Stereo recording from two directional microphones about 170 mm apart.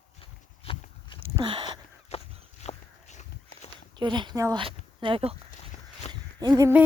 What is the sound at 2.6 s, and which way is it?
Walk, 40° left (ahead or behind).